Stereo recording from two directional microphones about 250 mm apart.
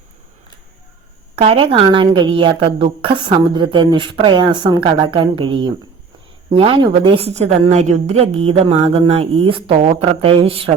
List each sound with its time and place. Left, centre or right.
1.4 s a woman's voice: right